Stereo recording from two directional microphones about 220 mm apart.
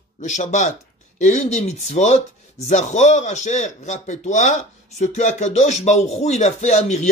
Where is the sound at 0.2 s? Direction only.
35° left (ahead or behind).